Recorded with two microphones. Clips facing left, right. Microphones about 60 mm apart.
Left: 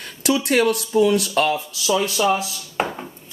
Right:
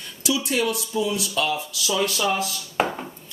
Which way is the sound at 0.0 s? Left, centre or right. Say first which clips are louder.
Left 5 dB; left.